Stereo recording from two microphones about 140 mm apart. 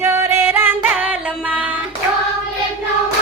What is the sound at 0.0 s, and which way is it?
Music, 20° right (ahead or behind).